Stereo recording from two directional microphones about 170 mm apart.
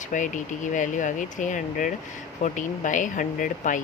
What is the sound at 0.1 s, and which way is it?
Speech, 50° left (ahead or behind).